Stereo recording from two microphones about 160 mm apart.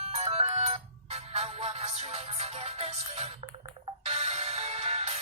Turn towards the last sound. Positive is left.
turn(degrees=-40)  # may be behind; listen again after turning